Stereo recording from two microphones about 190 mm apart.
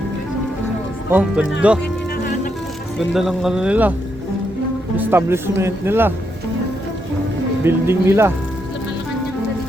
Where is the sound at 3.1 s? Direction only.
Centre (ahead or behind).